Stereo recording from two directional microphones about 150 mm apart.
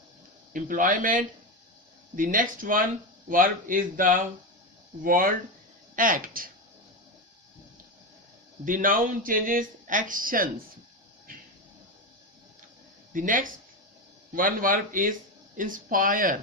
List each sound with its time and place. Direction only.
0.5 s speech: 65° right (ahead or behind)
8.6 s speech: 65° right (ahead or behind)
13.1 s speech: 65° right (ahead or behind)